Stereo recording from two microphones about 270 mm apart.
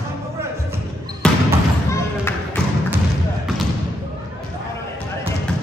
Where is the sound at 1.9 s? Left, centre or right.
Centre.